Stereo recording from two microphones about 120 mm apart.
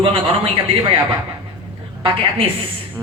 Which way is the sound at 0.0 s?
50° right (ahead or behind).